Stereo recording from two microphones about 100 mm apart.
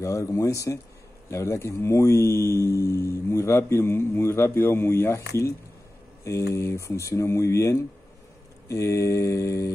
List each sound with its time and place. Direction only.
0.0 s mantra: 30° left (ahead or behind)
1.3 s speech: 30° left (ahead or behind)
8.6 s mantra: 30° left (ahead or behind)